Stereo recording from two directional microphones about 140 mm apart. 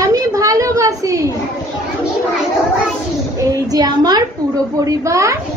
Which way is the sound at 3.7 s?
30° right (ahead or behind).